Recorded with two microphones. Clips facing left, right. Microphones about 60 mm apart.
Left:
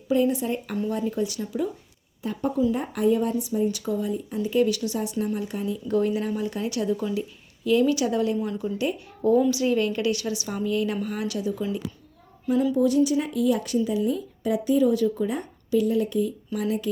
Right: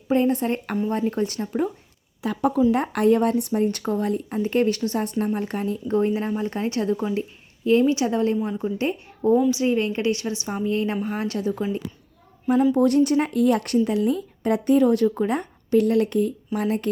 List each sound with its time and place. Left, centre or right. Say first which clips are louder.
0.1 s speech: right 2 dB; right
2.2 s speech: right 5 dB; right
2.7 s a woman's voice: right 4 dB; right
4.4 s speech: right 1 dB; right
5.9 s a woman's voice: right 1 dB; right
12.7 s a woman's voice: right 3 dB; right